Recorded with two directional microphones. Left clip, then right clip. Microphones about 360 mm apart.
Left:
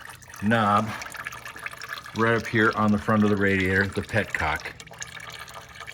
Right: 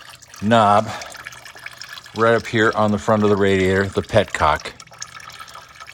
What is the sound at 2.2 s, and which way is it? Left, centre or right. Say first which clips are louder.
Speech: right 6 dB; centre.